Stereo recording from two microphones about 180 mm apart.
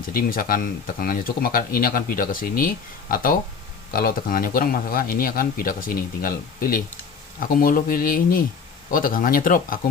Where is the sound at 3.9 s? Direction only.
55° left (ahead or behind).